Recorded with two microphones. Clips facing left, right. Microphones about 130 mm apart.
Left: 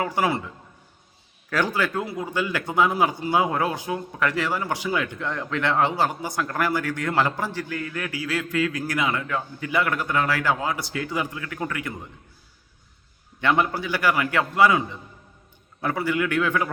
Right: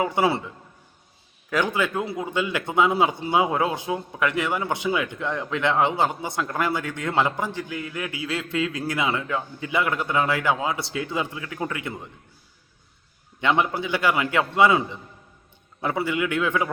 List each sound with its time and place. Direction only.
0.0 s a man's voice: 25° right (ahead or behind)
13.4 s a man's voice: 20° right (ahead or behind)